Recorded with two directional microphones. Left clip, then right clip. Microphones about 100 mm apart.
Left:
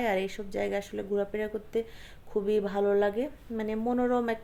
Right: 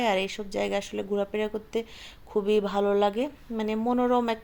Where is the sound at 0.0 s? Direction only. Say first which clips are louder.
Right 3 dB; 20° right (ahead or behind).